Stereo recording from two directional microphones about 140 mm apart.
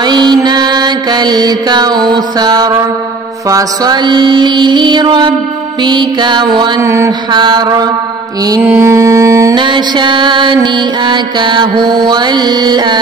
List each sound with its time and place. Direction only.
0.0 s mantra: 30° right (ahead or behind)
6.8 s mantra: 20° right (ahead or behind)
7.3 s mantra: 30° right (ahead or behind)
9.6 s mantra: 35° right (ahead or behind)